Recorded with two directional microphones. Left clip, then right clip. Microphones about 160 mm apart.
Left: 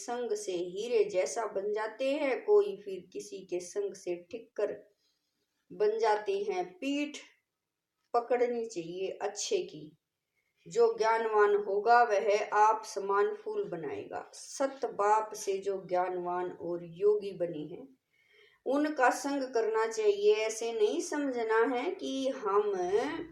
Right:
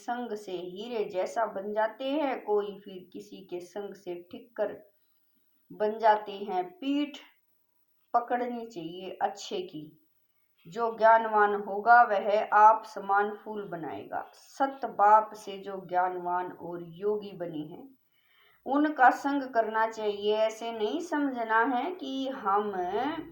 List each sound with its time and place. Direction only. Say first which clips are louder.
0.0 s a woman's voice: even; 30° left (ahead or behind)
5.7 s a woman's voice: right 3 dB; 30° left (ahead or behind)
8.1 s a woman's voice: even; 30° left (ahead or behind)
18.6 s a woman's voice: right 5 dB; 30° left (ahead or behind)